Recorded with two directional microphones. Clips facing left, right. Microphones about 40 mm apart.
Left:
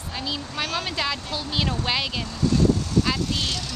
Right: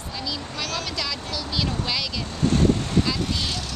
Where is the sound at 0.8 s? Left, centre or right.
Left.